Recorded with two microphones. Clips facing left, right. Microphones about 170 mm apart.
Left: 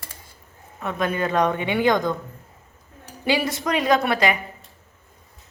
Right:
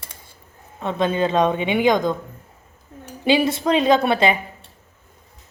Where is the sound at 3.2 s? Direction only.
25° right (ahead or behind).